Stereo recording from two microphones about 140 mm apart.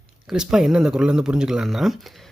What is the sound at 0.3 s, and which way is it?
Speech, 5° right (ahead or behind).